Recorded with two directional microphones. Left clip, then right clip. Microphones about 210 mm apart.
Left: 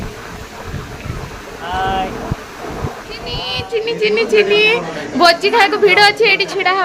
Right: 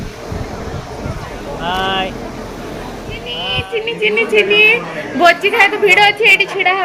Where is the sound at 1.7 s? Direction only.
55° right (ahead or behind).